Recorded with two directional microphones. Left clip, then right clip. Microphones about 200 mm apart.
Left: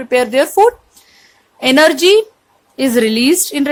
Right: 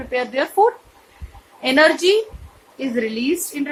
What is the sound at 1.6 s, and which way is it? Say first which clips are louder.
A woman's voice: left 5 dB; 55° left (ahead or behind).